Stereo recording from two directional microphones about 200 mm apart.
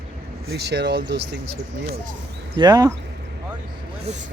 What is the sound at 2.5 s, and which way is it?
Speech, 20° right (ahead or behind).